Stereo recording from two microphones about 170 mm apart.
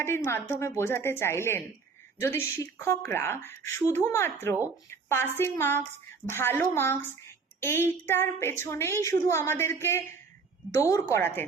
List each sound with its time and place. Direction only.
0.0 s speech: 15° left (ahead or behind)